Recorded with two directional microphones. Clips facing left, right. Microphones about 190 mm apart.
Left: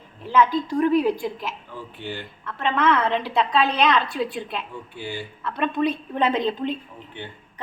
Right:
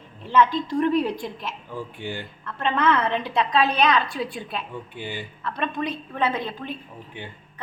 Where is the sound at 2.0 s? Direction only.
10° right (ahead or behind).